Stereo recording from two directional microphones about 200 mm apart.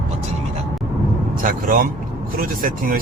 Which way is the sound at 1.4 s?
45° right (ahead or behind).